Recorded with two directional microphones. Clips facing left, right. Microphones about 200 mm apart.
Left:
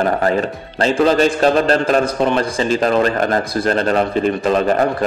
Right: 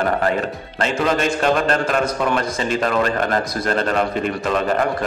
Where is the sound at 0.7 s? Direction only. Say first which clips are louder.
Left 6 dB; 35° left (ahead or behind).